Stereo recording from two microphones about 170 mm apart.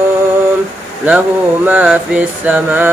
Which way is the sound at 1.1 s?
10° right (ahead or behind).